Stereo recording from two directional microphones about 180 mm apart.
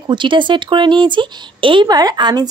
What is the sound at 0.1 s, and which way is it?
A woman's voice, 25° right (ahead or behind).